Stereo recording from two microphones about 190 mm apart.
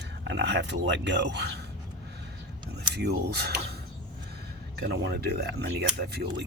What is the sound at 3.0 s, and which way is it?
Speech, 55° right (ahead or behind).